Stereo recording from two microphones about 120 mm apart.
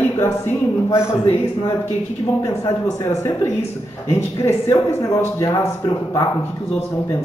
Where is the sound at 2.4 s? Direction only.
25° left (ahead or behind).